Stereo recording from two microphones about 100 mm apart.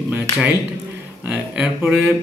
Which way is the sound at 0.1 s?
15° right (ahead or behind).